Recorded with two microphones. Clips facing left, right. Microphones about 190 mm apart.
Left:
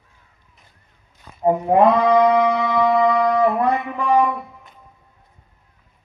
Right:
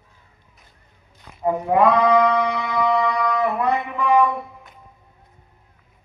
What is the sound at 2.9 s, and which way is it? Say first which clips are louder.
Music: left 5 dB; 30° left (ahead or behind).